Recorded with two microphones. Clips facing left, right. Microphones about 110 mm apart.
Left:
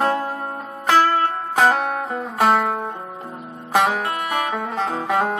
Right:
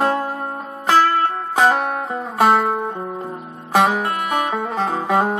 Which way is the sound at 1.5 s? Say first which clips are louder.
Right 1 dB; 15° right (ahead or behind).